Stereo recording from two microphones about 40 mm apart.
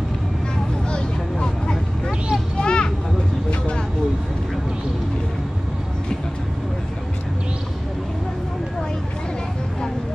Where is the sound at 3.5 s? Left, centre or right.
Left.